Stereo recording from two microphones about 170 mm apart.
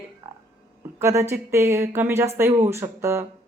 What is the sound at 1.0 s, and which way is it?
A woman's voice, 15° right (ahead or behind).